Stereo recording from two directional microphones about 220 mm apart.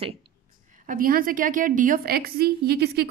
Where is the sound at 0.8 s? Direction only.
40° right (ahead or behind).